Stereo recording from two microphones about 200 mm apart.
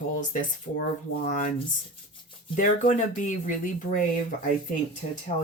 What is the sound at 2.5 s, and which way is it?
Speech, 40° left (ahead or behind).